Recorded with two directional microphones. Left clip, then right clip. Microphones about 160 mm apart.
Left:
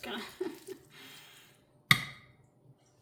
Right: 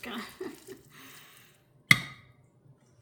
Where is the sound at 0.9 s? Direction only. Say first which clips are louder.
Right 1 dB; 15° left (ahead or behind).